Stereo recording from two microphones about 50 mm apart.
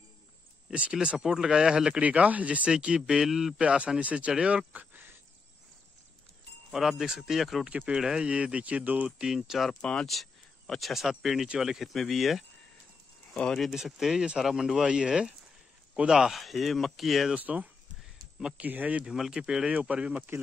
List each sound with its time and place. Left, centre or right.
0.9 s speech: centre
3.5 s speech: right
6.7 s speech: centre
7.7 s speech: right
8.0 s speech: centre
8.3 s speech: right
9.2 s speech: centre
9.8 s speech: centre
10.8 s speech: centre
13.3 s speech: centre
13.8 s speech: centre
17.4 s speech: right
19.0 s speech: centre; by 20.2 s right